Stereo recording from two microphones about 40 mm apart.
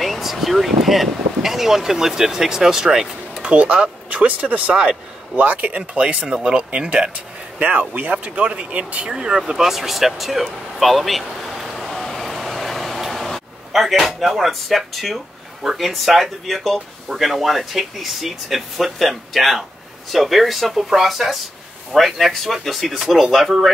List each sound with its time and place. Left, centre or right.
0.0 s speech: centre
3.4 s speech: right
5.8 s speech: right
7.2 s speech: right
8.4 s speech: right
9.4 s speech: centre
11.7 s vehicle: centre
13.1 s speech: centre